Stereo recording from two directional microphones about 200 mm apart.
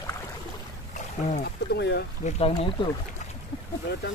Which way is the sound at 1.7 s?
55° left (ahead or behind).